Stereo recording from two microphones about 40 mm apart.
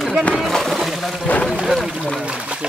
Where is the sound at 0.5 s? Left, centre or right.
Centre.